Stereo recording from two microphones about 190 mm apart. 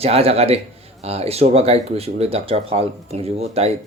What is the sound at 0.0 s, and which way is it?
Speech, 30° right (ahead or behind).